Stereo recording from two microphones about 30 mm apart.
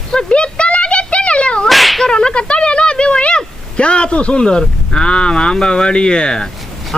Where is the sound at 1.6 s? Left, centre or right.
Centre.